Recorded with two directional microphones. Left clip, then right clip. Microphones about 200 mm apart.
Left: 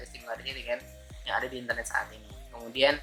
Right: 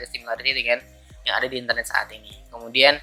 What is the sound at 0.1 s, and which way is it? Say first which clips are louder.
Speech: right 14 dB; 15° right (ahead or behind).